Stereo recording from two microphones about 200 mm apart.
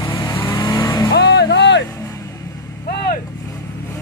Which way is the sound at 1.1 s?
60° left (ahead or behind).